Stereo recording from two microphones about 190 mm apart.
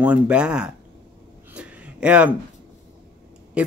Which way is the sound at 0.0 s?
5° right (ahead or behind).